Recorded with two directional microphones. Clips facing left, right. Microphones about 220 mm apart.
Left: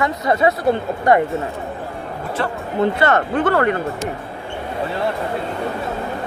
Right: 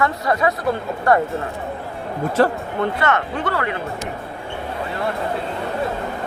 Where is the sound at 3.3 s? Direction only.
50° left (ahead or behind).